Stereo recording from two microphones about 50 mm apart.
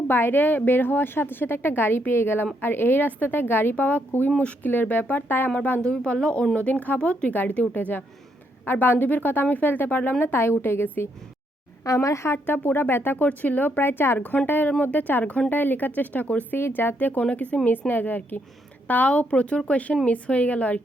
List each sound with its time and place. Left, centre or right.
0.1 s a woman's voice: left
3.8 s a woman's voice: left
4.7 s a woman's voice: left
5.8 s speech: centre
7.3 s a woman's voice: left
12.0 s a woman's voice: left
12.5 s a woman's voice: left
14.2 s a woman's voice: left
16.5 s a woman's voice: left
17.7 s a woman's voice: left